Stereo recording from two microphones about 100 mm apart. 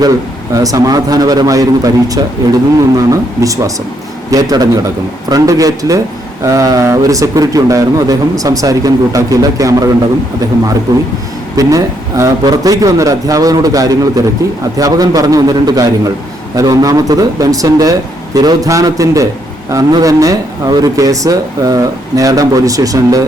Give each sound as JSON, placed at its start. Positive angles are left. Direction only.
{"t": 0.0, "sound": "a man's voice", "side_deg": -35}
{"t": 11.5, "sound": "a man's voice", "side_deg": -30}